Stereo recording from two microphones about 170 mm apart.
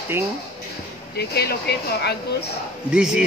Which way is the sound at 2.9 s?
5° right (ahead or behind).